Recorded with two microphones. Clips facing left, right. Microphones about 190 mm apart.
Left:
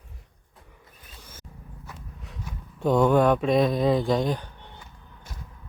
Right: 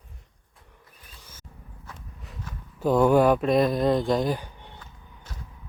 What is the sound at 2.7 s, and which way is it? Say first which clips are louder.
Speech: right 1 dB; 5° right (ahead or behind).